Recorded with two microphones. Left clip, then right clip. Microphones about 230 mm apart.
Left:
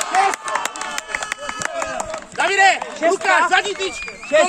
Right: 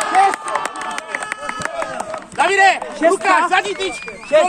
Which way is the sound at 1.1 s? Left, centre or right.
Left.